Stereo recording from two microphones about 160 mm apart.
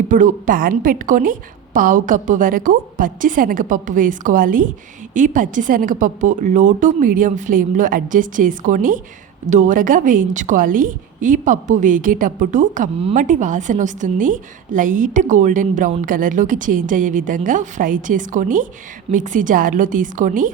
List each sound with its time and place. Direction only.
0.1 s a woman's voice: 55° right (ahead or behind)